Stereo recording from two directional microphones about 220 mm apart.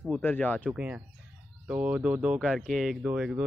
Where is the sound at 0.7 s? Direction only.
5° right (ahead or behind).